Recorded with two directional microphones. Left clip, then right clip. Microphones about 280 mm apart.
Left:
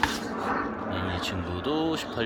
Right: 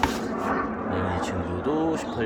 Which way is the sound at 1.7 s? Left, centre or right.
Centre.